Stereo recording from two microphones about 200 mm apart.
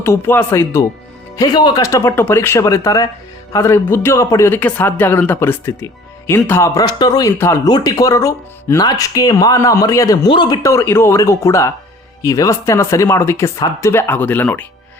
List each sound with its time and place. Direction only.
0.0 s speech: 10° left (ahead or behind)